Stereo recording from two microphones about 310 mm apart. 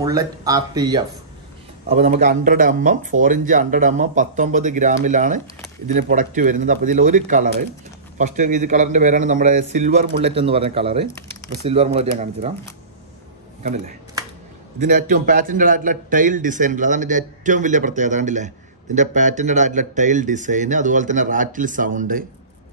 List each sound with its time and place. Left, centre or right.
0.0 s a man's voice: centre
14.8 s a man's voice: right